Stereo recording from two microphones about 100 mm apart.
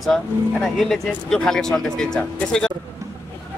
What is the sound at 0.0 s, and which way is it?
Speech, centre (ahead or behind).